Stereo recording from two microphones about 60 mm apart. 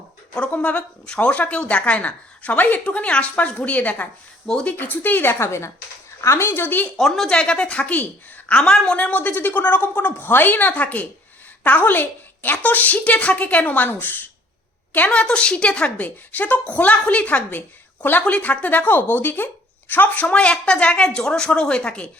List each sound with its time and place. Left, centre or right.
0.5 s a woman's voice: left
5.4 s speech: left
6.5 s speech: left
6.9 s a woman's voice: centre; by 14.2 s left
15.1 s a woman's voice: centre
20.3 s a woman's voice: centre